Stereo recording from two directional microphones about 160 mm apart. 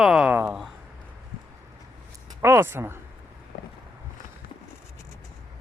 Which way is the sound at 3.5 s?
75° left (ahead or behind).